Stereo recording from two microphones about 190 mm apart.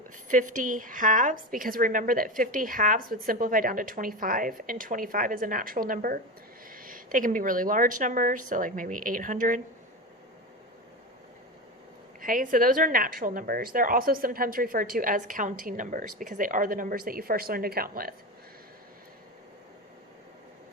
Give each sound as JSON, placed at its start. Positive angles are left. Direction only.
{"t": 0.3, "sound": "a woman's voice", "side_deg": -40}
{"t": 12.2, "sound": "a woman's voice", "side_deg": -45}